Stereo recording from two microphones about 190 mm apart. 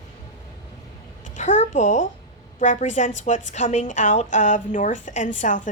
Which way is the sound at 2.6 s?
40° left (ahead or behind).